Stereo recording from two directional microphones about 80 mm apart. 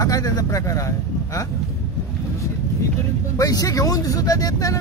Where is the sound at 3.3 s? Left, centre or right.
Left.